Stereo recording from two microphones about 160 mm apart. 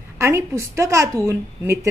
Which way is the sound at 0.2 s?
15° right (ahead or behind).